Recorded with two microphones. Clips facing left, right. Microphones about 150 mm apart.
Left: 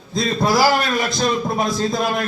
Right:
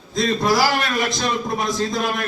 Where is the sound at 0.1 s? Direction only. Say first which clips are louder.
Even; 35° left (ahead or behind).